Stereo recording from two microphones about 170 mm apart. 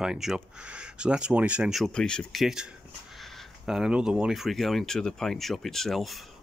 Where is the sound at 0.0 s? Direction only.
5° right (ahead or behind).